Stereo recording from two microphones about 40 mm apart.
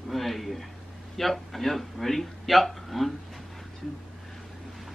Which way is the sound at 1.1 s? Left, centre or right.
Centre.